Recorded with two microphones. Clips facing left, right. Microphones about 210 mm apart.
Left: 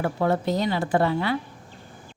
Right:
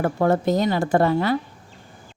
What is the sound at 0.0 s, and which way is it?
A woman's voice, 45° right (ahead or behind).